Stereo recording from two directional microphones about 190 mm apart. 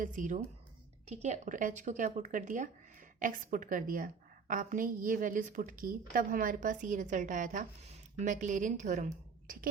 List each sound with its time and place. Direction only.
0.0 s a woman's voice: 45° right (ahead or behind)